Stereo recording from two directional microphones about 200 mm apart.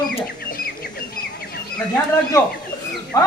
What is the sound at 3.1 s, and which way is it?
Speech, 20° left (ahead or behind).